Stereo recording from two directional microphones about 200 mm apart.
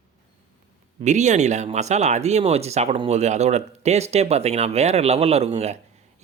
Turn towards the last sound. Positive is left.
turn(degrees=-35)  # may be behind; listen again after turning